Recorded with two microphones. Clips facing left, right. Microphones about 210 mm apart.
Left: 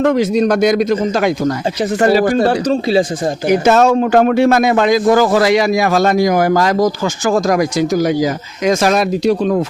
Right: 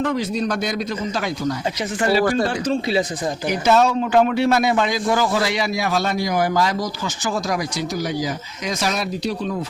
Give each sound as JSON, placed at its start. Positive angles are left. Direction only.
{"t": 0.0, "sound": "a man's voice", "side_deg": 75}
{"t": 2.0, "sound": "speech", "side_deg": 50}
{"t": 2.5, "sound": "speech", "side_deg": 35}
{"t": 3.7, "sound": "speech", "side_deg": 45}
{"t": 4.6, "sound": "a man's voice", "side_deg": 80}
{"t": 5.1, "sound": "speech", "side_deg": 50}
{"t": 5.4, "sound": "speech", "side_deg": 90}
{"t": 8.0, "sound": "speech", "side_deg": 90}